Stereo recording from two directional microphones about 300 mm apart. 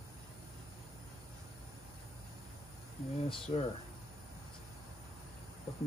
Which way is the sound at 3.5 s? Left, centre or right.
Centre.